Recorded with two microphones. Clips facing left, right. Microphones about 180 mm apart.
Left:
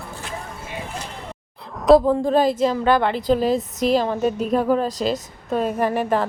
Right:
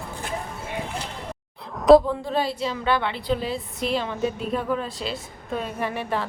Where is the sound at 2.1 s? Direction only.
45° left (ahead or behind).